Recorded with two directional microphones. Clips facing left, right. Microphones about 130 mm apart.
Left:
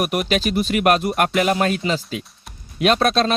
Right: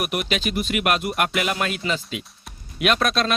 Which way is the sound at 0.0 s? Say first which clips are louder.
Left 5 dB; 40° left (ahead or behind).